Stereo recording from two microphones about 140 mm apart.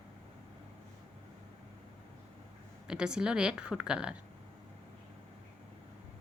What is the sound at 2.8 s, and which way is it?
A woman's voice, 5° right (ahead or behind).